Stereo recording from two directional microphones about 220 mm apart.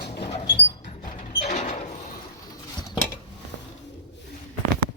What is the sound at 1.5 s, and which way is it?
Mechanisms, 35° left (ahead or behind).